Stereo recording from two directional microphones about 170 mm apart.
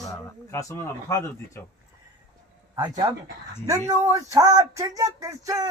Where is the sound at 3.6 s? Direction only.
15° right (ahead or behind).